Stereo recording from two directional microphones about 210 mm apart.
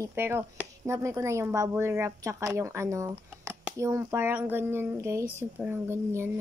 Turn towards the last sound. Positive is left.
turn(degrees=-10)  # may be behind; listen again after turning